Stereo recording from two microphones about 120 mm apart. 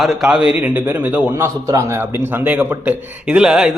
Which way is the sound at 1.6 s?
25° right (ahead or behind).